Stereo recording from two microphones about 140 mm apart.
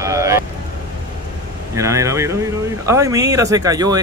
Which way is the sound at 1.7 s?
20° right (ahead or behind).